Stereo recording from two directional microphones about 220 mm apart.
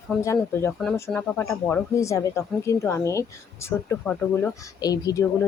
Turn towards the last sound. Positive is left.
turn(degrees=15)  # may be behind; listen again after turning